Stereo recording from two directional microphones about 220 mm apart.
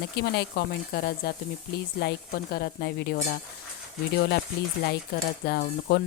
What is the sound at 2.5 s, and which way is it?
Speech, 45° left (ahead or behind).